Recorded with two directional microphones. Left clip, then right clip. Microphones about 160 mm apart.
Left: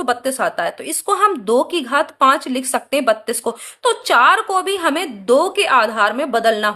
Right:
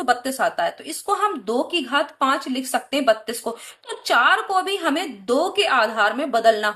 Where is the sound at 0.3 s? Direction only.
45° left (ahead or behind).